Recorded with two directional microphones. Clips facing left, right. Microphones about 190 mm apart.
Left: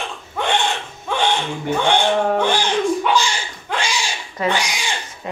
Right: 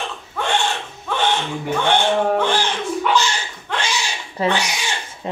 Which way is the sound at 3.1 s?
10° left (ahead or behind).